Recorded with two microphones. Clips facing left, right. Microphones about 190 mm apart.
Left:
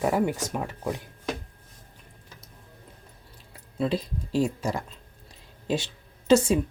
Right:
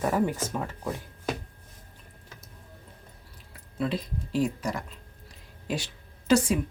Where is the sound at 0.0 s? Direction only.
15° left (ahead or behind).